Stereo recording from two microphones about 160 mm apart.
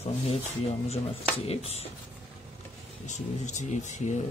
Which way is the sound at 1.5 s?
40° left (ahead or behind).